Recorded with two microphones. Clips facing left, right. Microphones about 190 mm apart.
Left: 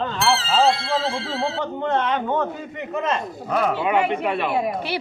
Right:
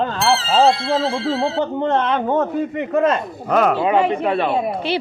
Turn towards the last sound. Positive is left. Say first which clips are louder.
# right 3 dB
turn(degrees=-30)  # may be behind; listen again after turning